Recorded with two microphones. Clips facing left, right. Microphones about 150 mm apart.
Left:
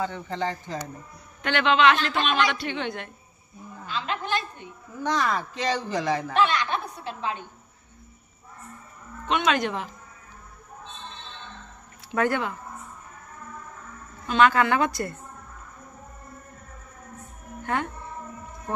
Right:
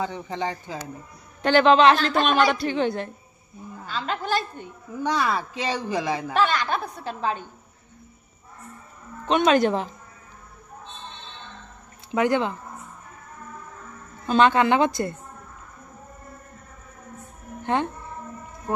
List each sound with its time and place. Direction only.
0.0 s speech: 15° right (ahead or behind)
1.4 s a woman's voice: 35° right (ahead or behind)
5.0 s speech: 10° right (ahead or behind)
6.3 s a woman's voice: 35° right (ahead or behind)
9.2 s a woman's voice: 35° right (ahead or behind)
12.2 s a woman's voice: 25° right (ahead or behind)
14.2 s a woman's voice: 35° right (ahead or behind)
14.5 s a woman's voice: 25° right (ahead or behind)
17.6 s a woman's voice: 25° right (ahead or behind)